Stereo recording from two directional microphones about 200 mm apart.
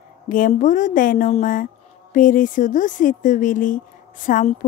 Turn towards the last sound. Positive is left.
turn(degrees=40)  # may be behind; listen again after turning